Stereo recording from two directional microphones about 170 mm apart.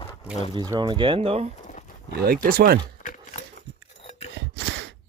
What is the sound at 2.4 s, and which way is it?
Speech, 60° right (ahead or behind).